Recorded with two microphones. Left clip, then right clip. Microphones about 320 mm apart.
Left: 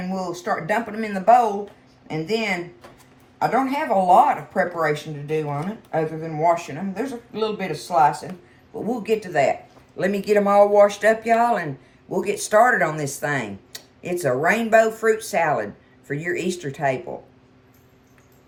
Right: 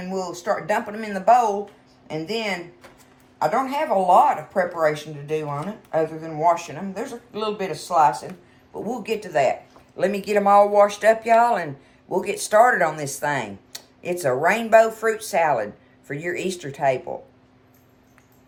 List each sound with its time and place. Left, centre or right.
0.0 s speech: centre